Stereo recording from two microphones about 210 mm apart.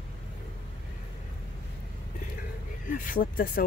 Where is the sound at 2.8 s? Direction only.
40° left (ahead or behind).